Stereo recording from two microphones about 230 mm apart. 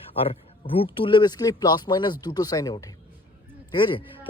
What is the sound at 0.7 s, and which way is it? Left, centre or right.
Speech, left.